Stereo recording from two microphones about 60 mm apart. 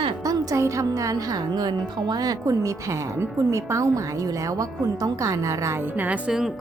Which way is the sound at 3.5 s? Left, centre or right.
Right.